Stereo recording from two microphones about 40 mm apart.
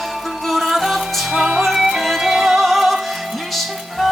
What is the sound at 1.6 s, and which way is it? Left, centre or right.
Music, centre.